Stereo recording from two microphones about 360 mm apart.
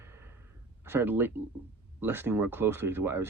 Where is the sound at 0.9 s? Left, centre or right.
Centre.